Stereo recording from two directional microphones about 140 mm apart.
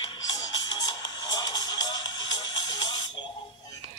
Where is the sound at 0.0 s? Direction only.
30° left (ahead or behind).